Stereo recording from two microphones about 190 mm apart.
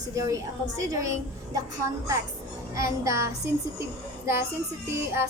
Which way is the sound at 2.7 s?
15° right (ahead or behind).